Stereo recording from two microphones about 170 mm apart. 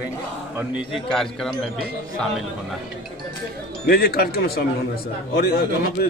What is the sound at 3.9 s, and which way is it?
A man's voice, 65° left (ahead or behind).